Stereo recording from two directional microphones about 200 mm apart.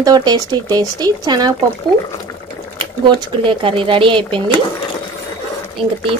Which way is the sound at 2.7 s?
25° right (ahead or behind).